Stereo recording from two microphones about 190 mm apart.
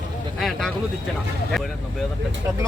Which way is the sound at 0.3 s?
Centre (ahead or behind).